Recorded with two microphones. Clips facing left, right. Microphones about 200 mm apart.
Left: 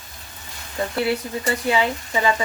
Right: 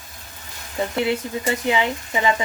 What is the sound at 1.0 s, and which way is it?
Speech, 20° right (ahead or behind).